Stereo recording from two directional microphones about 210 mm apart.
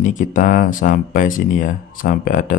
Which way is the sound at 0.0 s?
35° left (ahead or behind).